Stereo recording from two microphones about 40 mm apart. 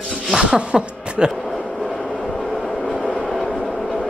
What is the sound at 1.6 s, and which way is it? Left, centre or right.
Vehicle, centre.